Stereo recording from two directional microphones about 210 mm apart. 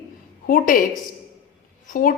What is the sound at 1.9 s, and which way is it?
Speech, 40° left (ahead or behind).